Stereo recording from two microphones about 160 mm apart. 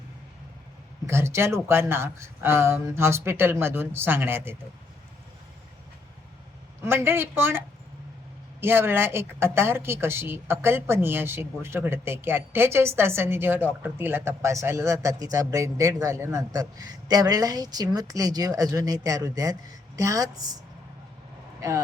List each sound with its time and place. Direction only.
1.0 s a woman's voice: 15° right (ahead or behind)
6.8 s a woman's voice: 15° right (ahead or behind)
8.6 s a woman's voice: 15° right (ahead or behind)